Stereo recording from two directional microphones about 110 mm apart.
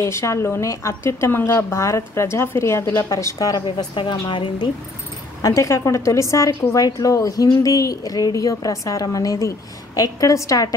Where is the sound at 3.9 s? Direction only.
50° left (ahead or behind).